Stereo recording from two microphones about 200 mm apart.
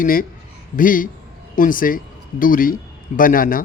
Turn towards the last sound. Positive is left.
turn(degrees=45)  # may be behind; listen again after turning